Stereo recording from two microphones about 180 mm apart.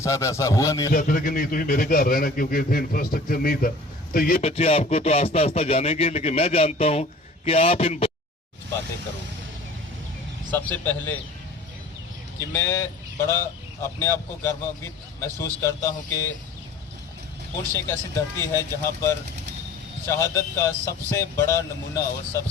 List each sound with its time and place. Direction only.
0.0 s speech: 15° left (ahead or behind)
0.9 s a man's voice: 50° left (ahead or behind)
4.4 s speech: 35° left (ahead or behind)
10.5 s speech: 10° left (ahead or behind)
12.5 s speech: 15° left (ahead or behind)
17.8 s speech: 15° left (ahead or behind)